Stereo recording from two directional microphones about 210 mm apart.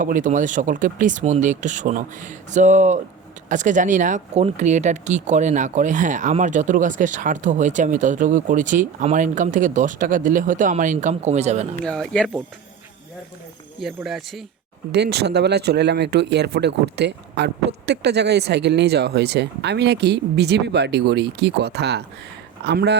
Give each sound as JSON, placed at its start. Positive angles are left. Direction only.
{"t": 0.0, "sound": "speech", "side_deg": -40}
{"t": 11.9, "sound": "speech", "side_deg": 5}
{"t": 13.8, "sound": "speech", "side_deg": 0}
{"t": 14.9, "sound": "speech", "side_deg": -50}